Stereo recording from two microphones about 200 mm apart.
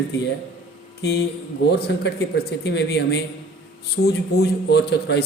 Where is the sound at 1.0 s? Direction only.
55° left (ahead or behind).